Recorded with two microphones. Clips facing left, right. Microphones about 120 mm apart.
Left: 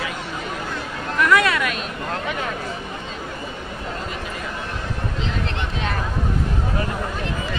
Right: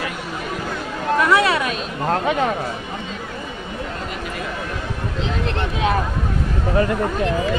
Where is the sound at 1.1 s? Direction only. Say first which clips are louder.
Right 2 dB; 35° right (ahead or behind).